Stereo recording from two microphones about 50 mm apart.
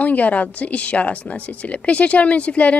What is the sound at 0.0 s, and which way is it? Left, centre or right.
Speech, left.